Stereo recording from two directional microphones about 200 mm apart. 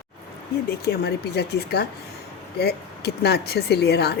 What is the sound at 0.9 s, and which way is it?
Speech, 55° left (ahead or behind).